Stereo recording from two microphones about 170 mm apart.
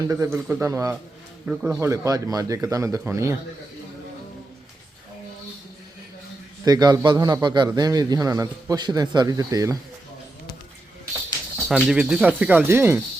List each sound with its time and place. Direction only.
0.1 s speech: 20° right (ahead or behind)
6.7 s speech: 25° right (ahead or behind)
11.7 s speech: 5° right (ahead or behind)